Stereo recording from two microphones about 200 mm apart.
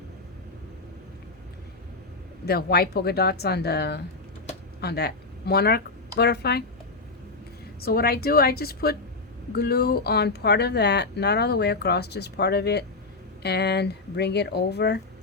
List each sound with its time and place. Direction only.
2.5 s speech: 50° left (ahead or behind)
7.8 s speech: 50° left (ahead or behind)